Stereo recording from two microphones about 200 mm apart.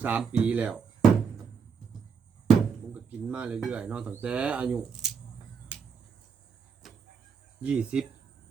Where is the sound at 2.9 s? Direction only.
5° right (ahead or behind).